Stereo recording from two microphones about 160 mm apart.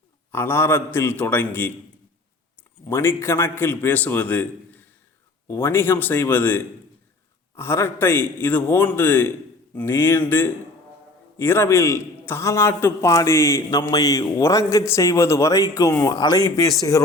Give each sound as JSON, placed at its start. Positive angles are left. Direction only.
{"t": 0.3, "sound": "a man's voice", "side_deg": 15}
{"t": 2.9, "sound": "a man's voice", "side_deg": 15}